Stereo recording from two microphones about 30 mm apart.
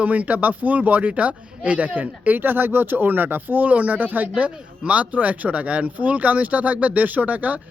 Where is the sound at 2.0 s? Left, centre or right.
Right.